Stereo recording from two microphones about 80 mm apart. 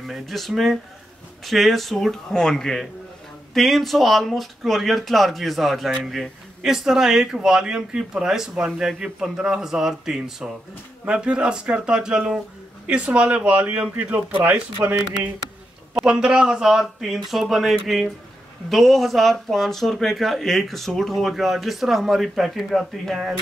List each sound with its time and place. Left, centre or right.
0.0 s speech: centre; by 14.6 s right
14.8 s speech: right
16.0 s speech: centre